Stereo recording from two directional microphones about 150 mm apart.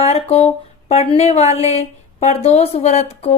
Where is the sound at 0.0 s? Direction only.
45° left (ahead or behind).